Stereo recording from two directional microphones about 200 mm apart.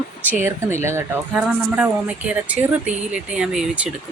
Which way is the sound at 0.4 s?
15° right (ahead or behind).